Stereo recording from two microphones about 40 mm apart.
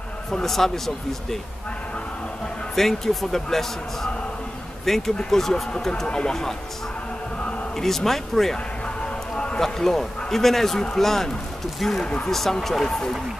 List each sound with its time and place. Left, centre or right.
0.3 s a man's voice: centre
2.7 s a man's voice: centre
6.0 s speech: left
7.7 s a man's voice: centre
8.8 s a sound: left
9.6 s a man's voice: centre